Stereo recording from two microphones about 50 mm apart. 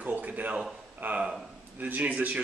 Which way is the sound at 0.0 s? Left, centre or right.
Right.